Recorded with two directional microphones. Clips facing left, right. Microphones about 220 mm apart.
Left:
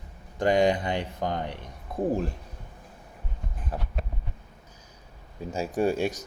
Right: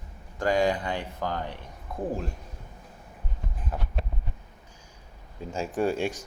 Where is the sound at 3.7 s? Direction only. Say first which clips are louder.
Left 1 dB; 30° left (ahead or behind).